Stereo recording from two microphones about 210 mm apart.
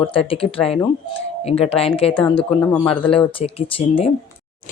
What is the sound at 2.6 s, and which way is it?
Speech, 10° left (ahead or behind).